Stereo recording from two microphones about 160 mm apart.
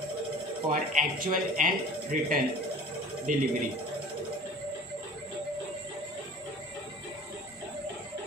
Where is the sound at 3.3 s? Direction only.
55° right (ahead or behind).